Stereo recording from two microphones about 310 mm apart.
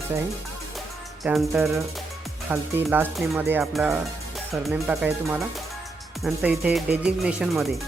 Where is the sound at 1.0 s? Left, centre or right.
Centre.